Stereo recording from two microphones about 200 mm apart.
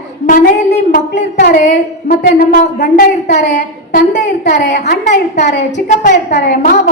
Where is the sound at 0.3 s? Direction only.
40° left (ahead or behind).